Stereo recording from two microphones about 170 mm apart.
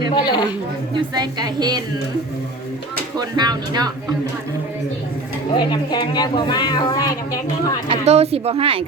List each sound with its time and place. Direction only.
0.1 s speech: 25° left (ahead or behind)
1.1 s speech: 25° right (ahead or behind)
3.2 s speech: 25° right (ahead or behind)
5.5 s speech: 25° left (ahead or behind)
7.9 s speech: 40° right (ahead or behind)